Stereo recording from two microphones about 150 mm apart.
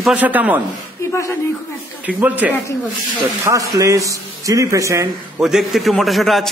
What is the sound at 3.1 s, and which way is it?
A man's voice, 20° right (ahead or behind).